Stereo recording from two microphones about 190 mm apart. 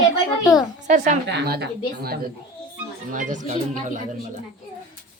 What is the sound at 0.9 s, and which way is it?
Speech, 40° right (ahead or behind).